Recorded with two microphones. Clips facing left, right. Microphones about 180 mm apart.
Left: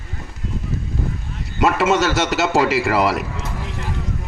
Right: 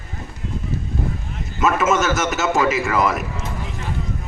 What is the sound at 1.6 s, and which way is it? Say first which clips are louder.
A man's voice: left 1 dB; 35° left (ahead or behind).